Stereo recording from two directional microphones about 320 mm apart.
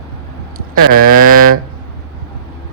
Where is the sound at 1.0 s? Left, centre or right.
Right.